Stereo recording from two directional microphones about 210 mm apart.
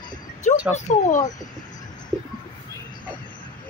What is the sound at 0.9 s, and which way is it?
Speech, 35° left (ahead or behind).